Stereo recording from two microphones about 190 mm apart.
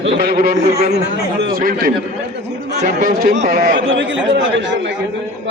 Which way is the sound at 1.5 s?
50° right (ahead or behind).